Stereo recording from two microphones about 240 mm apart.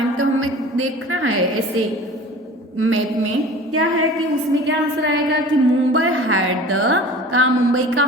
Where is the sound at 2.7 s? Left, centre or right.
Right.